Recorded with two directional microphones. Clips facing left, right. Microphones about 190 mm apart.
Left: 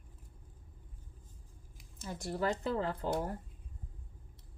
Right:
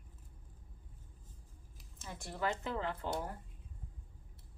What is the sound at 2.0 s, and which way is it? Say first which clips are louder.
Speech: left 4 dB; 40° left (ahead or behind).